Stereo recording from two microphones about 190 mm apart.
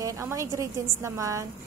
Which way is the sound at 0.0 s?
15° right (ahead or behind).